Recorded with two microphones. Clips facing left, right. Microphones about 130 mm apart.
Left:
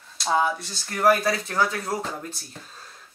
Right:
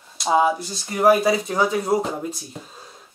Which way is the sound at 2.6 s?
10° right (ahead or behind).